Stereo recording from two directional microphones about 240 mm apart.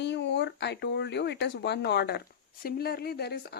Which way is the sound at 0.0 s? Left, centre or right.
Left.